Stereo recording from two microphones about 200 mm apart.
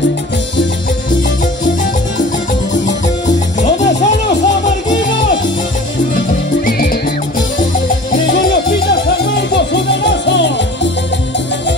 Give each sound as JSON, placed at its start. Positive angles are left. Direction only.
{"t": 3.6, "sound": "music", "side_deg": 35}
{"t": 4.9, "sound": "music", "side_deg": 65}
{"t": 6.6, "sound": "music", "side_deg": 45}
{"t": 8.3, "sound": "music", "side_deg": 55}